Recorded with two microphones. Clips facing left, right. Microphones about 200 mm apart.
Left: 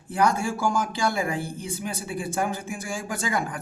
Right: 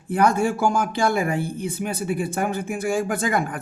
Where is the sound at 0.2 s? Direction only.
60° right (ahead or behind).